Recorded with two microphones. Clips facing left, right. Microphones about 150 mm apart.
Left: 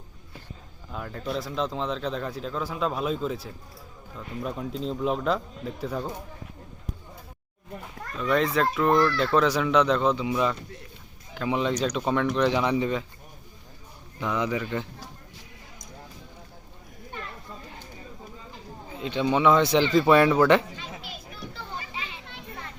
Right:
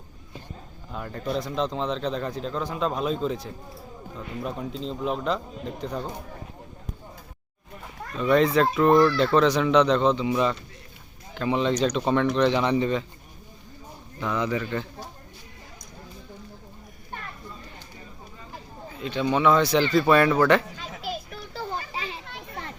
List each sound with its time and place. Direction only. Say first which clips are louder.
0.9 s speech: right 2 dB; centre (ahead or behind)
8.1 s speech: right 4 dB; centre (ahead or behind)
14.2 s speech: right 1 dB; 15° left (ahead or behind)
18.9 s speech: even; 20° left (ahead or behind)
20.7 s children playing: right 6 dB; 40° right (ahead or behind)